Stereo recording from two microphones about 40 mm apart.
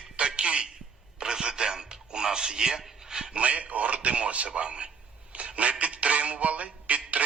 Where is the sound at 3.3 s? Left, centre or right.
Right.